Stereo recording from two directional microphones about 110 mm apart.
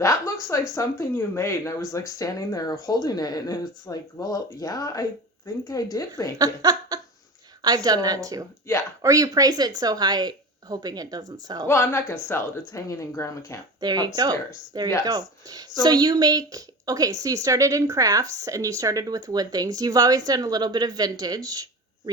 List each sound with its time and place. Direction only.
0.8 s speech: 25° left (ahead or behind)
6.4 s a woman's voice: 35° right (ahead or behind)
11.7 s speech: 20° left (ahead or behind)
13.8 s a woman's voice: 40° right (ahead or behind)